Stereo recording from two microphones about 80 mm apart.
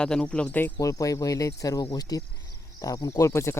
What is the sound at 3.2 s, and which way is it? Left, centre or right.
Speech, left.